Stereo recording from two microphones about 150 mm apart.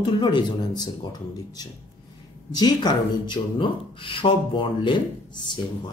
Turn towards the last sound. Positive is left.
turn(degrees=30)  # may be behind; listen again after turning